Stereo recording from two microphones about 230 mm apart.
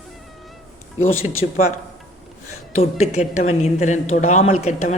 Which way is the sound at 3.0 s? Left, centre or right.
Left.